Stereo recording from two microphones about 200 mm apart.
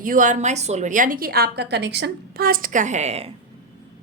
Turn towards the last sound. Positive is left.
turn(degrees=-35)  # may be behind; listen again after turning